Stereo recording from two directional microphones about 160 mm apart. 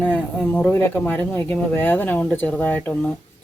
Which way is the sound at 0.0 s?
10° left (ahead or behind).